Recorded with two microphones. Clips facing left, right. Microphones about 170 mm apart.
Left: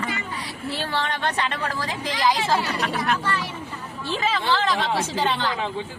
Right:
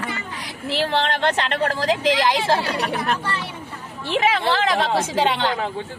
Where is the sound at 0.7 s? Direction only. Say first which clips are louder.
Right 6 dB; 75° right (ahead or behind).